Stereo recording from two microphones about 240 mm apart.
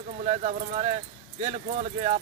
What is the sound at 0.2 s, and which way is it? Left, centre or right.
Speech, right.